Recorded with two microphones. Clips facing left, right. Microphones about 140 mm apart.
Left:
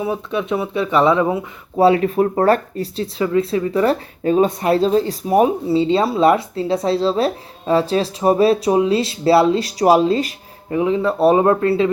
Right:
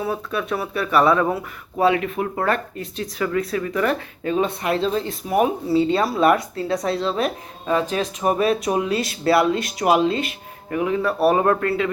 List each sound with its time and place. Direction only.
0.0 s speech: 20° left (ahead or behind)
1.8 s speech: 35° left (ahead or behind)
5.6 s speech: 25° left (ahead or behind)
10.7 s speech: 25° left (ahead or behind)